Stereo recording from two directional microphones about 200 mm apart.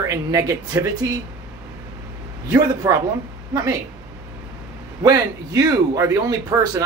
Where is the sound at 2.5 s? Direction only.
15° right (ahead or behind).